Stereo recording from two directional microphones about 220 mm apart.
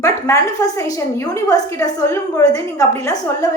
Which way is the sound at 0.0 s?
15° left (ahead or behind).